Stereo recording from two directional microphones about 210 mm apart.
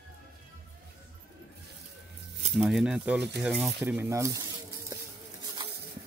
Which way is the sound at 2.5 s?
Centre (ahead or behind).